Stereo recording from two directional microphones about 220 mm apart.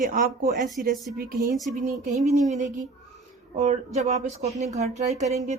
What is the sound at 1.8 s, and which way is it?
Speech, 30° right (ahead or behind).